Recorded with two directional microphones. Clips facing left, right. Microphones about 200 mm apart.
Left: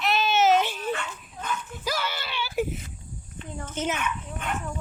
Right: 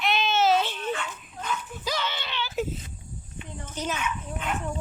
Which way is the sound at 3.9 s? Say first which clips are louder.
Even; 60° left (ahead or behind).